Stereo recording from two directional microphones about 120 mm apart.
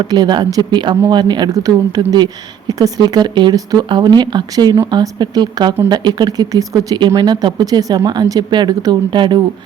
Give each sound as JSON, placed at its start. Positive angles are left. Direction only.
{"t": 0.0, "sound": "speech", "side_deg": -35}